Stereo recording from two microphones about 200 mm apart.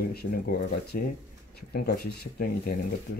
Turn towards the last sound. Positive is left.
turn(degrees=65)  # may be behind; listen again after turning